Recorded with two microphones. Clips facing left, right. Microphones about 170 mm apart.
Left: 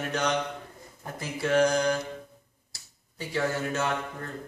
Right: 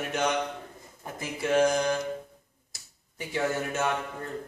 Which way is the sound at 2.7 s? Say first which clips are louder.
Even; 20° right (ahead or behind).